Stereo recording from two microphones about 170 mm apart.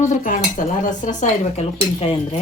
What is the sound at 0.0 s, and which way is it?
Speech, 50° left (ahead or behind).